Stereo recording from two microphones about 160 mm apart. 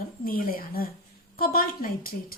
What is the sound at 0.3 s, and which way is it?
A woman's voice, 65° left (ahead or behind).